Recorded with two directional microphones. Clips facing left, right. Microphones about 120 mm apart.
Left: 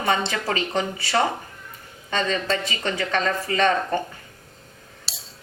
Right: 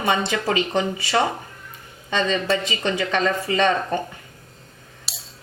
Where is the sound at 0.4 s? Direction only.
15° right (ahead or behind).